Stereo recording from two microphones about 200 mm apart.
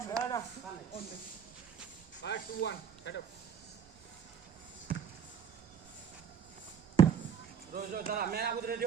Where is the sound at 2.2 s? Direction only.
60° left (ahead or behind).